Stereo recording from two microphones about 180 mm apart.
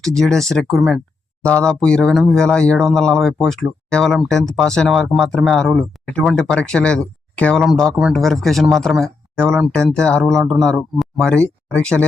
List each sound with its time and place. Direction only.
0.0 s speech: 5° left (ahead or behind)